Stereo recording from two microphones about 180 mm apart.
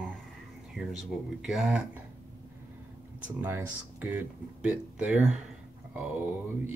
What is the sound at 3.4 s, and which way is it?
Speech, 10° right (ahead or behind).